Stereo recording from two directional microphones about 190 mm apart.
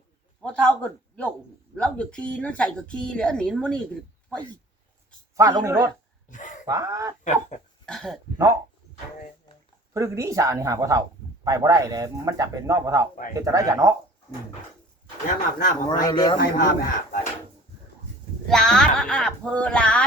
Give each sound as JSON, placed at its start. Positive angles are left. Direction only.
{"t": 0.4, "sound": "speech", "side_deg": 5}
{"t": 5.4, "sound": "speech", "side_deg": -15}
{"t": 6.3, "sound": "speech", "side_deg": 40}
{"t": 6.7, "sound": "speech", "side_deg": -20}
{"t": 7.9, "sound": "speech", "side_deg": 0}
{"t": 9.9, "sound": "speech", "side_deg": -15}
{"t": 15.5, "sound": "speech", "side_deg": 45}
{"t": 16.0, "sound": "a man's voice", "side_deg": 20}
{"t": 16.4, "sound": "speech", "side_deg": 50}
{"t": 18.4, "sound": "speech", "side_deg": 5}